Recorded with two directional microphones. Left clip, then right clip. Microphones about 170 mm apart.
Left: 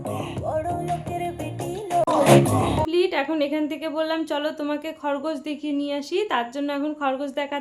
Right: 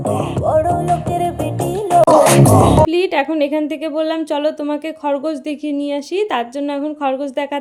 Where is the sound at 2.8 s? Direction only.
30° right (ahead or behind).